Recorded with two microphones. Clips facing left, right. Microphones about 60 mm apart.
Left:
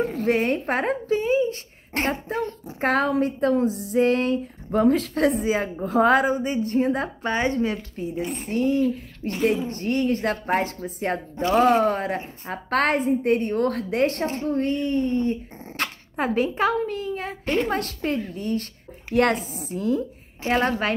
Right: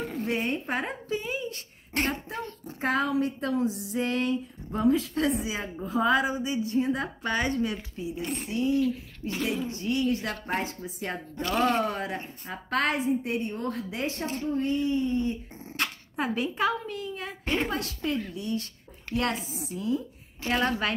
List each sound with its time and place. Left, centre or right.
0.2 s speech: left
2.8 s speech: left
4.7 s a woman's voice: left
5.1 s a woman's voice: left
9.2 s a woman's voice: left
9.7 s a woman's voice: left
10.5 s a woman's voice: left
11.0 s speech: left
12.4 s a woman's voice: left
14.2 s speech: left
14.5 s a woman's voice: left
15.7 s a woman's voice: left
19.1 s a woman's voice: left
20.4 s speech: left